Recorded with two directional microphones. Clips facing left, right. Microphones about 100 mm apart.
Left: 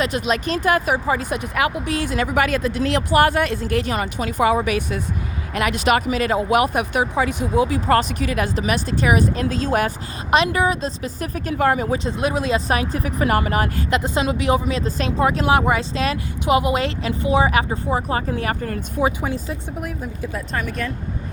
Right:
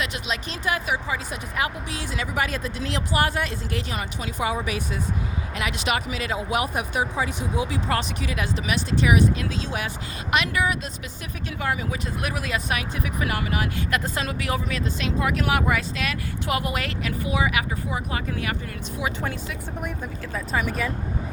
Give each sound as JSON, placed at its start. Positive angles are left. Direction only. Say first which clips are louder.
{"t": 0.0, "sound": "speech", "louder": "left 8 dB", "side_deg": 45}
{"t": 1.3, "sound": "speech", "louder": "left 6 dB", "side_deg": 70}
{"t": 2.0, "sound": "speech", "louder": "left 7 dB", "side_deg": 55}
{"t": 5.5, "sound": "speech", "louder": "left 8 dB", "side_deg": 50}
{"t": 7.5, "sound": "speech", "louder": "left 9 dB", "side_deg": 50}
{"t": 10.3, "sound": "speech", "louder": "left 6 dB", "side_deg": 30}
{"t": 12.0, "sound": "speech", "louder": "left 8 dB", "side_deg": 25}
{"t": 13.9, "sound": "speech", "louder": "left 8 dB", "side_deg": 20}
{"t": 14.8, "sound": "speech", "louder": "left 4 dB", "side_deg": 40}
{"t": 18.6, "sound": "speech", "louder": "left 9 dB", "side_deg": 45}
{"t": 20.3, "sound": "speech", "louder": "right 2 dB", "side_deg": -5}